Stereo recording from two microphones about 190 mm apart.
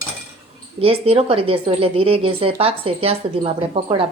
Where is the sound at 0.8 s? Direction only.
30° right (ahead or behind).